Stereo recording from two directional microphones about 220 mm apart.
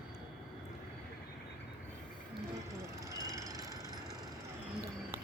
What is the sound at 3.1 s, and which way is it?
Vehicle, 15° right (ahead or behind).